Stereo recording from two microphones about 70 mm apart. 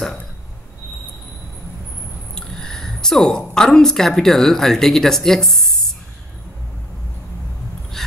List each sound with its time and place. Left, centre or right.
2.3 s a woman's voice: centre